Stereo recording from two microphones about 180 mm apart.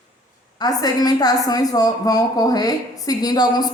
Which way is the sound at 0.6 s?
20° left (ahead or behind).